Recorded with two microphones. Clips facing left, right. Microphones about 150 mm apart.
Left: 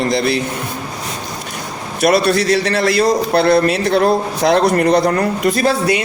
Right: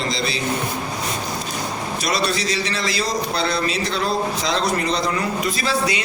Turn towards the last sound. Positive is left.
turn(degrees=55)  # may be behind; listen again after turning